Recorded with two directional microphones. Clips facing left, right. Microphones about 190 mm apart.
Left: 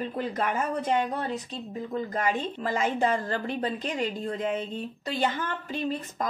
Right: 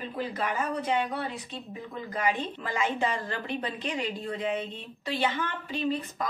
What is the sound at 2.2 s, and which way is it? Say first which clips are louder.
A woman's voice: right 1 dB; 45° left (ahead or behind).